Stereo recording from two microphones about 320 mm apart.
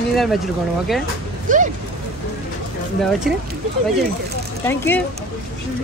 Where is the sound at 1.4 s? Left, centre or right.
Right.